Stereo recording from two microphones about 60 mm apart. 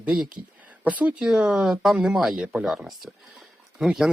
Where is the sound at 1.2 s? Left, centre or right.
Centre.